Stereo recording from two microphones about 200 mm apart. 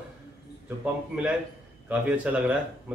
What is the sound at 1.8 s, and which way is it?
Speech, 5° right (ahead or behind).